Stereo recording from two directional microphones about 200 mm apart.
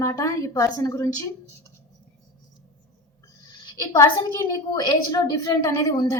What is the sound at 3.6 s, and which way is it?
A woman's voice, 15° left (ahead or behind).